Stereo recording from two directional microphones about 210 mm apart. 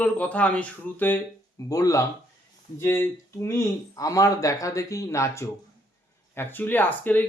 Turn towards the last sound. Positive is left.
turn(degrees=10)  # may be behind; listen again after turning